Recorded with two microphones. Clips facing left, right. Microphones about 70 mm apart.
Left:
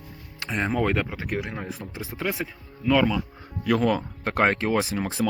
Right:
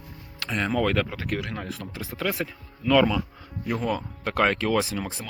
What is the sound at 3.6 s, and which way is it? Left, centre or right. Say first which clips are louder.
Speech: left 6 dB; left.